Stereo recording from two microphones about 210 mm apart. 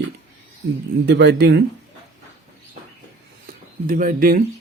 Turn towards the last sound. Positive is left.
turn(degrees=-40)  # may be behind; listen again after turning